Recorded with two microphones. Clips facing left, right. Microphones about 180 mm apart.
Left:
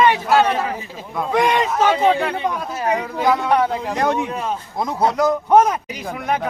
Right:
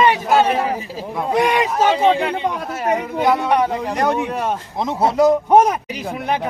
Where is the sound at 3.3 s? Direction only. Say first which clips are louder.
Right 1 dB; 20° right (ahead or behind).